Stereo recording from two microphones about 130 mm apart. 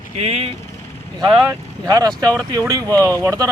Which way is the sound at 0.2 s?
50° right (ahead or behind).